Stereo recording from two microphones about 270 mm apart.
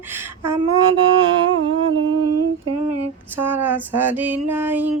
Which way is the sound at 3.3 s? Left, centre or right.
Centre.